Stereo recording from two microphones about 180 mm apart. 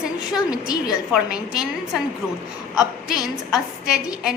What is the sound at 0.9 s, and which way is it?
Speech, centre (ahead or behind).